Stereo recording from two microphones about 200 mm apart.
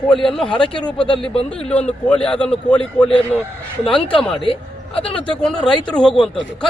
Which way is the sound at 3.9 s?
5° left (ahead or behind).